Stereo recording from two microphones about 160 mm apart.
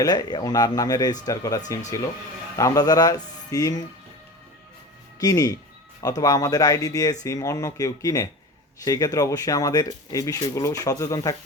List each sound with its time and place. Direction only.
0.0 s speech: 25° left (ahead or behind)
5.2 s speech: 20° left (ahead or behind)